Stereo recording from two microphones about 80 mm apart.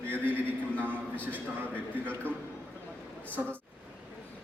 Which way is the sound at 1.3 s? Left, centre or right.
Right.